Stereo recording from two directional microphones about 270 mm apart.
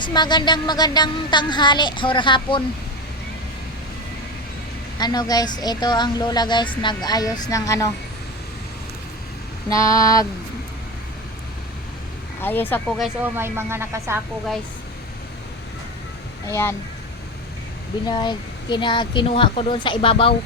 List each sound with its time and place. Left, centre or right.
0.0 s speech: centre
4.9 s speech: centre
9.6 s speech: centre
12.4 s speech: centre
13.2 s speech: centre
16.5 s speech: centre
18.0 s speech: centre